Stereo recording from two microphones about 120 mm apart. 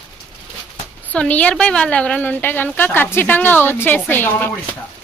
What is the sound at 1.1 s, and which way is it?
A woman's voice, 10° left (ahead or behind).